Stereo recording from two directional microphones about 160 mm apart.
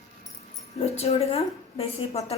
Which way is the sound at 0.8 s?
40° left (ahead or behind).